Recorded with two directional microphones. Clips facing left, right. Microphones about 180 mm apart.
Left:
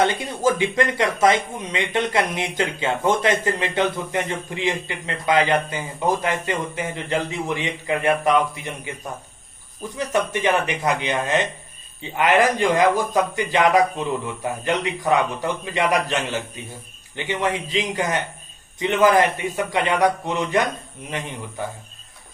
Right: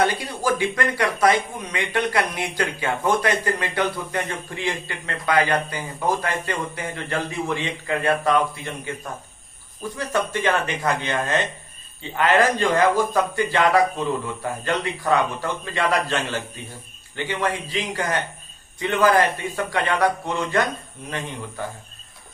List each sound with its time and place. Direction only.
0.0 s speech: 25° left (ahead or behind)
10.0 s a man's voice: 20° left (ahead or behind)